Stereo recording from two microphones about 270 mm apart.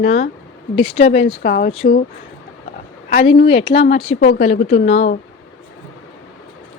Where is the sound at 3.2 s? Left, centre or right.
Left.